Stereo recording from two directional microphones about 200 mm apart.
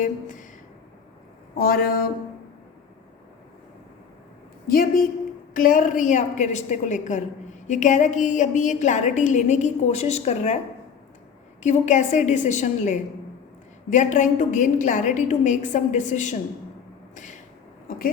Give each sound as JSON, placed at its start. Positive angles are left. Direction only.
{"t": 0.0, "sound": "speech", "side_deg": 40}
{"t": 1.5, "sound": "speech", "side_deg": 50}
{"t": 4.6, "sound": "a woman's voice", "side_deg": 50}
{"t": 11.6, "sound": "a woman's voice", "side_deg": 35}